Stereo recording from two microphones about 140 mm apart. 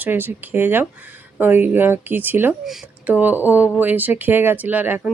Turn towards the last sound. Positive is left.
turn(degrees=-10)  # may be behind; listen again after turning